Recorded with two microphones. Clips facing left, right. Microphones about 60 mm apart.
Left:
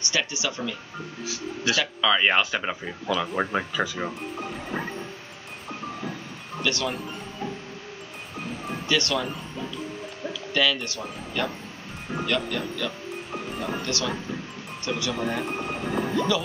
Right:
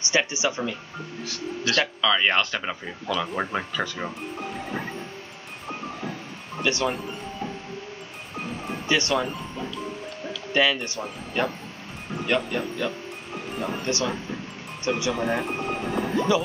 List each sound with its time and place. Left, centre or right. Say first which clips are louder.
0.0 s speech: right 4 dB; right
1.2 s speech: left 1 dB; centre
5.7 s train: right 1 dB; right
6.6 s speech: right 2 dB; right
6.9 s music: right 2 dB; centre
8.8 s speech: right 2 dB; right
10.5 s speech: right 2 dB; right
13.3 s music: right 1 dB; centre
13.8 s speech: right 2 dB; right
15.1 s speech: right 2 dB; centre
16.2 s speech: right 3 dB; right